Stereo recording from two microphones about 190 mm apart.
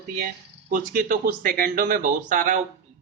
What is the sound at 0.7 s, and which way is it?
Speech, 45° right (ahead or behind).